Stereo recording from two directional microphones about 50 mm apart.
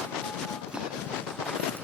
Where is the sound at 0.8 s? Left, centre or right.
Centre.